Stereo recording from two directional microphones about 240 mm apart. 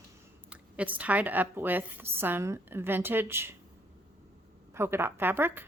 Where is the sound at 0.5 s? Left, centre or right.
Centre.